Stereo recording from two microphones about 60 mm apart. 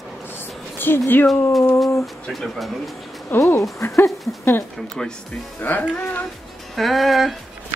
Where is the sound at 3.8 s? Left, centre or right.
Left.